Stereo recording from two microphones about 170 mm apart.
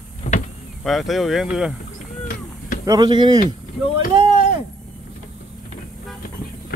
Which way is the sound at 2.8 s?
20° right (ahead or behind).